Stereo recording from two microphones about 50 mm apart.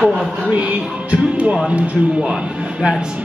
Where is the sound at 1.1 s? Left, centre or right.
Right.